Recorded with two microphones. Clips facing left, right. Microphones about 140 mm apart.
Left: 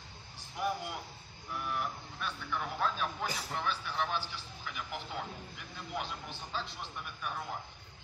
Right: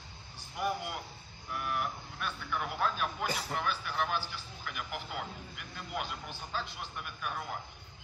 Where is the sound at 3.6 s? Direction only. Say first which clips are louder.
Left 1 dB; 5° right (ahead or behind).